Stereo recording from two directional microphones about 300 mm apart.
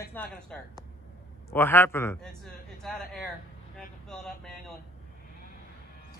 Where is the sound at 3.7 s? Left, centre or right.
Centre.